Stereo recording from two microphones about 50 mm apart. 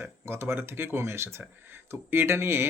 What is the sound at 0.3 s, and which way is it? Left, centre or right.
Speech, right.